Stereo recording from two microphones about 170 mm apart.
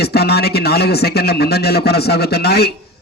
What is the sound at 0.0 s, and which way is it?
A man's voice, 70° left (ahead or behind).